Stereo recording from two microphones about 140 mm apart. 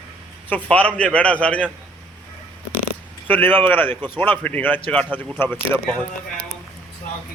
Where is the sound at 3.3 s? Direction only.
15° left (ahead or behind).